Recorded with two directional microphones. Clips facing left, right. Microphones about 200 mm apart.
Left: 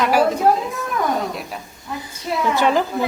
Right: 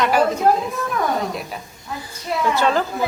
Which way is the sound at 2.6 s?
15° left (ahead or behind).